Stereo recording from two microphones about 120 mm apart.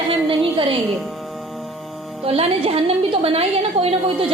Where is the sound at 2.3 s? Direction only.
55° right (ahead or behind).